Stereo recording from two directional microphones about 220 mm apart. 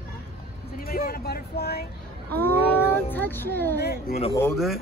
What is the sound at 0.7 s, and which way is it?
Speech, 45° left (ahead or behind).